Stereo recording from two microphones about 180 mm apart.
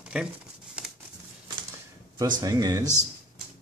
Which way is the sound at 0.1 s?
5° right (ahead or behind).